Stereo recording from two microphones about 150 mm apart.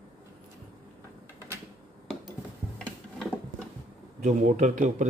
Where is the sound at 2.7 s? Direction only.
5° left (ahead or behind).